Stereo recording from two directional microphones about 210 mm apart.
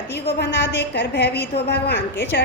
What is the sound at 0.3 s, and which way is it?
A woman's voice, 55° left (ahead or behind).